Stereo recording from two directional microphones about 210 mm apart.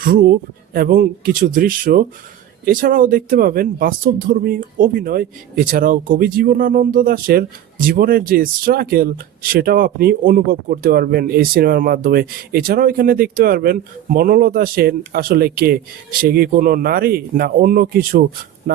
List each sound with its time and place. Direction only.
0.0 s speech: 45° right (ahead or behind)